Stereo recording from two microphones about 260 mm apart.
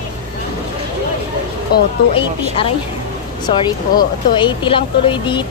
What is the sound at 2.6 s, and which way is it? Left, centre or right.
Speech, left.